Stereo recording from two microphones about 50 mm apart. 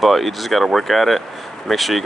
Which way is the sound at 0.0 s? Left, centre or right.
Centre.